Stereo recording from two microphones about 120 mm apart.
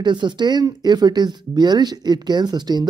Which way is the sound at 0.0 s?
40° right (ahead or behind).